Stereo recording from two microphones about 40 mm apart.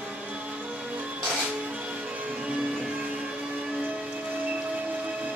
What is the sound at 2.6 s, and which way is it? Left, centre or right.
Train, right.